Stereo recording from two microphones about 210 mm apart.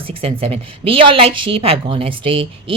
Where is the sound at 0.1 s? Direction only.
25° right (ahead or behind).